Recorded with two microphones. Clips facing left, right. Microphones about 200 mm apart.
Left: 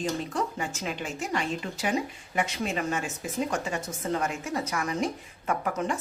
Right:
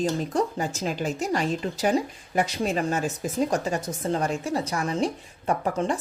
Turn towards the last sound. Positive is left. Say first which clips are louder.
# right 4 dB
turn(degrees=-30)  # may be behind; listen again after turning